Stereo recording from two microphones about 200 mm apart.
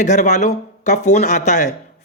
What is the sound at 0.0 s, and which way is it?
Speech, 35° left (ahead or behind).